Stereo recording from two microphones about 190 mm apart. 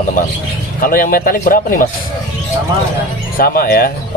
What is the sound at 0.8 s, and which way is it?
A man's voice, 50° left (ahead or behind).